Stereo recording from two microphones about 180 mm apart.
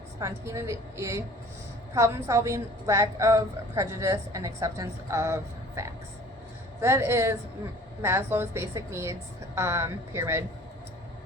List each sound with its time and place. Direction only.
0.2 s a woman's voice: 15° right (ahead or behind)